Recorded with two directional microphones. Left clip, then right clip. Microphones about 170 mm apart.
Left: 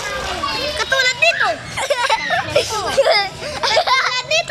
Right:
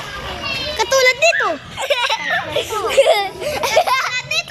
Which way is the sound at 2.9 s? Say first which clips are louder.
Right 2 dB; 15° right (ahead or behind).